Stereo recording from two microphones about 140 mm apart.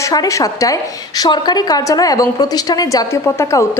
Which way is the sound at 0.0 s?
25° left (ahead or behind).